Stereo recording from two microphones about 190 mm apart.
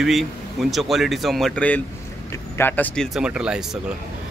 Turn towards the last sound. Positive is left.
turn(degrees=-5)  # may be behind; listen again after turning